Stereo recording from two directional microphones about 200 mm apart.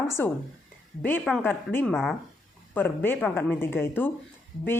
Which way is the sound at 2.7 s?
10° left (ahead or behind).